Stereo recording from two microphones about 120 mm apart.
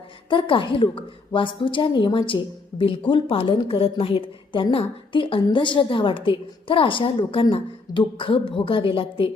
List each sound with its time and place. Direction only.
0.3 s a woman's voice: 45° left (ahead or behind)